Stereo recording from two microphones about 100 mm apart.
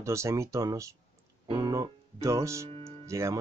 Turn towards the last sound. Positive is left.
turn(degrees=-30)  # may be behind; listen again after turning